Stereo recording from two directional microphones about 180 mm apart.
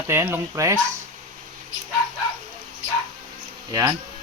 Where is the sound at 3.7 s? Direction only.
20° right (ahead or behind).